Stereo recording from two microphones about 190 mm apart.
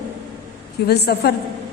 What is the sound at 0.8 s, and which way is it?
Speech, 60° left (ahead or behind).